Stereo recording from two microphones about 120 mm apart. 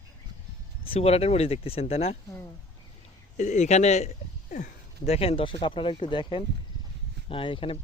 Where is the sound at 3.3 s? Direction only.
85° left.